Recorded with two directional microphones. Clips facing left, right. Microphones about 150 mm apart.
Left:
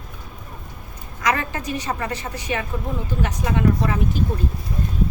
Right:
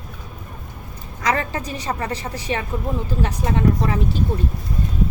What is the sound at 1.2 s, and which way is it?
A woman's voice, 30° right (ahead or behind).